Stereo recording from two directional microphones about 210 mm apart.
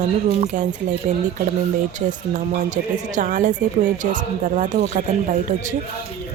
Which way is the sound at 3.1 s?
40° right (ahead or behind).